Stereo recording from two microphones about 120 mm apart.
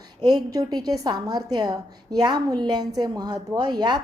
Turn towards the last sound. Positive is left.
turn(degrees=-35)  # may be behind; listen again after turning